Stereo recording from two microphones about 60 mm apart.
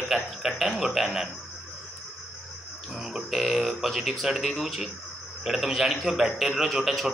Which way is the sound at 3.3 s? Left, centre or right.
Centre.